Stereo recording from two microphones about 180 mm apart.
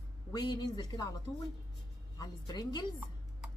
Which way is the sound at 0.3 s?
20° left (ahead or behind).